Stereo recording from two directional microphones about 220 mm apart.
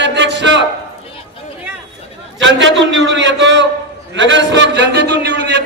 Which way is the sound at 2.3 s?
55° right (ahead or behind).